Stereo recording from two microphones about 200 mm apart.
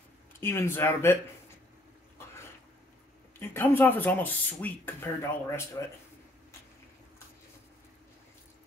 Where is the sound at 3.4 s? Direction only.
10° left (ahead or behind).